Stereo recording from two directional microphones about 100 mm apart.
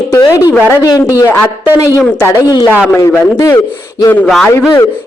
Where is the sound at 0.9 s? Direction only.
40° left (ahead or behind).